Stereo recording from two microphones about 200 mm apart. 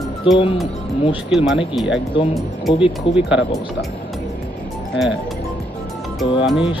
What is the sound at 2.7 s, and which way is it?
Speech, 25° left (ahead or behind).